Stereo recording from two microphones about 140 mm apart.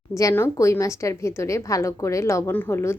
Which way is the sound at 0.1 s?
25° left (ahead or behind).